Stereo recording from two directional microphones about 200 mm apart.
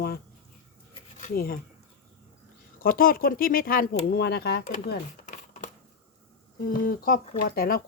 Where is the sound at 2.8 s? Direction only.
45° left (ahead or behind).